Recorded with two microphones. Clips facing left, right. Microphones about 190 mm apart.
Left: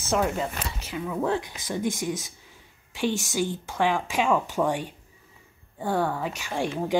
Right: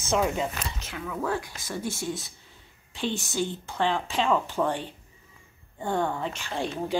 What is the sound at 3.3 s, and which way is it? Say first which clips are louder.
Speech: left 2 dB; 10° left (ahead or behind).